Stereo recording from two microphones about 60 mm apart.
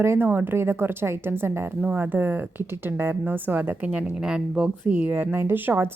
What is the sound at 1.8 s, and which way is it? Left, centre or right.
A woman's voice, right.